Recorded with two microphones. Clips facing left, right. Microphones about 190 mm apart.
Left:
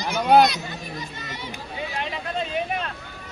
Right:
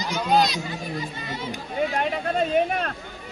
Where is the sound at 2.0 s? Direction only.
50° right (ahead or behind).